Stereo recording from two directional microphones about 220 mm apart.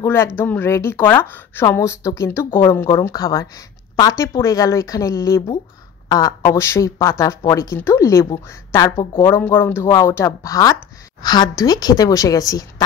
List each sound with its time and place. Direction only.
0.0 s speech: 10° left (ahead or behind)